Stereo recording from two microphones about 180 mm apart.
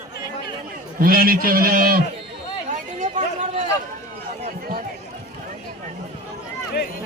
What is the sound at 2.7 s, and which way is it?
Chatter, 45° right (ahead or behind).